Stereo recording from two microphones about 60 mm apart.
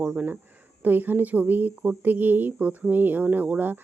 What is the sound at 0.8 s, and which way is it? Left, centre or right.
Speech, right.